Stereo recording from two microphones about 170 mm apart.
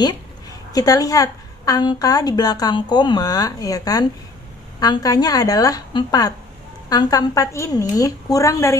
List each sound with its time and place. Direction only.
0.7 s a woman's voice: 20° left (ahead or behind)